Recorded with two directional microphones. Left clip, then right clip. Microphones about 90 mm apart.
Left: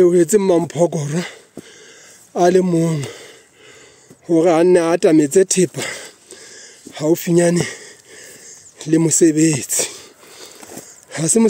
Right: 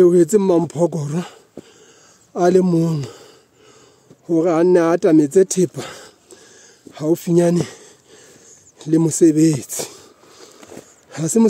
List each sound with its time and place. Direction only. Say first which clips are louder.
0.0 s speech: even; 25° right (ahead or behind)
2.3 s speech: left 1 dB; 20° right (ahead or behind)
2.6 s speech: left 1 dB; 30° right (ahead or behind)
3.1 s a sound: left 5 dB; 20° right (ahead or behind)
4.3 s speech: left 3 dB; 15° right (ahead or behind)
4.7 s a sound: left 1 dB; 15° right (ahead or behind)
11.1 s speech: left 1 dB; 20° right (ahead or behind)